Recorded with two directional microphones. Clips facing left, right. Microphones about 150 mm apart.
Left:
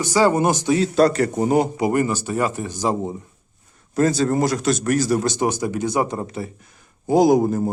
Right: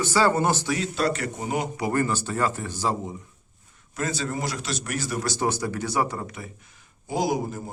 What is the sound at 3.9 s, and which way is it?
Speech, 40° left (ahead or behind).